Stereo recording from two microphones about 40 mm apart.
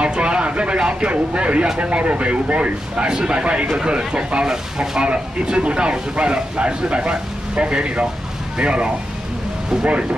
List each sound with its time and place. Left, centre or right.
0.0 s speech: right
4.5 s speech: centre
5.0 s speech: right